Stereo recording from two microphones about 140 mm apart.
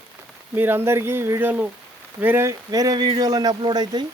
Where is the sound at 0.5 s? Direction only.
15° right (ahead or behind).